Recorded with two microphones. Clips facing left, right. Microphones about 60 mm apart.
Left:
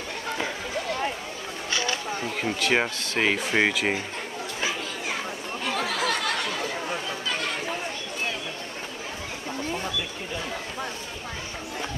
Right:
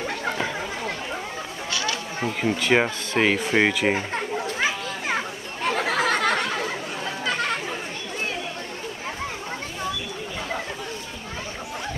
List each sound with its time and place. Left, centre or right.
1.7 s a sound: left
2.6 s speech: centre
3.9 s children playing: right